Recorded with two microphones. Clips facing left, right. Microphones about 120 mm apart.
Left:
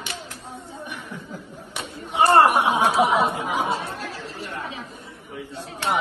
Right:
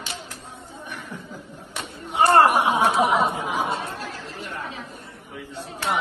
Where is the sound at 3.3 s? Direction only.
65° left (ahead or behind).